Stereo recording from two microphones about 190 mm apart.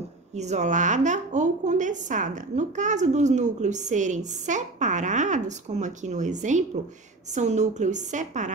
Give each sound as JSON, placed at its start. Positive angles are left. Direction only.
{"t": 0.4, "sound": "speech", "side_deg": -35}